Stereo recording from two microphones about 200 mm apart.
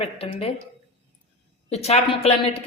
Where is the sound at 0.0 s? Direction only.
30° left (ahead or behind).